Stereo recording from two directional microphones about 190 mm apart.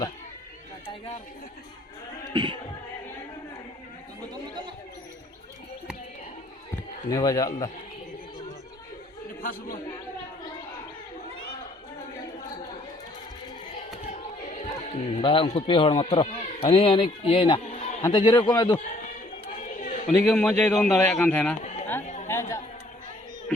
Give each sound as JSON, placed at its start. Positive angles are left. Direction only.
{"t": 2.3, "sound": "music", "side_deg": -25}
{"t": 7.1, "sound": "a man's voice", "side_deg": 20}
{"t": 9.4, "sound": "a man's voice", "side_deg": 50}
{"t": 14.1, "sound": "speech", "side_deg": 40}
{"t": 18.0, "sound": "a man's voice", "side_deg": 25}
{"t": 19.6, "sound": "chatter", "side_deg": 45}
{"t": 20.1, "sound": "a man's voice", "side_deg": 5}
{"t": 22.3, "sound": "a sound", "side_deg": 15}